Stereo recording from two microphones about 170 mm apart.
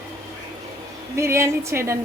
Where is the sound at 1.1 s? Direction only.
15° right (ahead or behind).